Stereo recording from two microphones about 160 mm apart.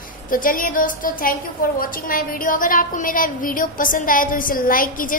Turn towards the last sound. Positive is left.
turn(degrees=60)  # may be behind; listen again after turning